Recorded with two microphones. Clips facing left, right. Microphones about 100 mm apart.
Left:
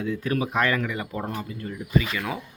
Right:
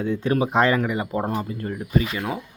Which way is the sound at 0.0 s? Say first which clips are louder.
Right 4 dB; 30° right (ahead or behind).